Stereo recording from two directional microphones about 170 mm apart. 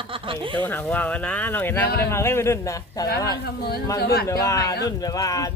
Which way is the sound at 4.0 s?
65° left (ahead or behind).